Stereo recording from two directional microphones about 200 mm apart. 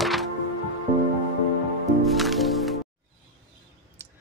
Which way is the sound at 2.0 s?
Centre (ahead or behind).